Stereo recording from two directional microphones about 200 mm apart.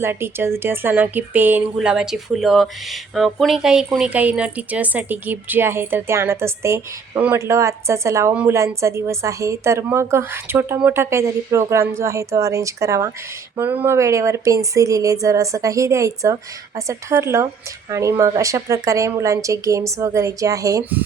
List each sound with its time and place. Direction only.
0.0 s speech: 10° right (ahead or behind)